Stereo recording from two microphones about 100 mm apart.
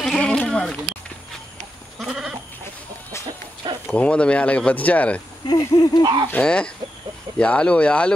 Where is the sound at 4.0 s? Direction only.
10° left (ahead or behind).